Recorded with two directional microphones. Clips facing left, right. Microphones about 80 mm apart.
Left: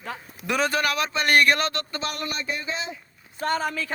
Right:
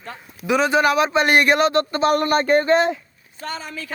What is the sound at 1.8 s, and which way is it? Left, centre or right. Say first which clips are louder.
Speech: right 12 dB; right.